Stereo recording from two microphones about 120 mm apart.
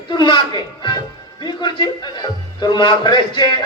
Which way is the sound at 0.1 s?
40° left (ahead or behind).